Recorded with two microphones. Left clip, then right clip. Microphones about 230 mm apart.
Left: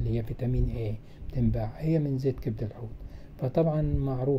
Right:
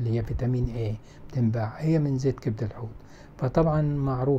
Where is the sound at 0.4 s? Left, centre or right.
Centre.